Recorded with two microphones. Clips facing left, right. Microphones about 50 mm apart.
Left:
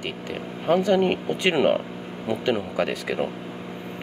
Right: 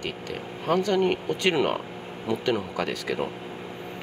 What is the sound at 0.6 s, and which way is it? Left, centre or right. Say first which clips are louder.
Speech: left 3 dB; left.